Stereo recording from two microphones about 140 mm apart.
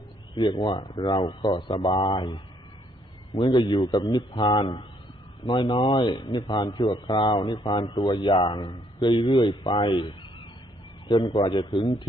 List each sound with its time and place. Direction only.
0.3 s speech: 35° left (ahead or behind)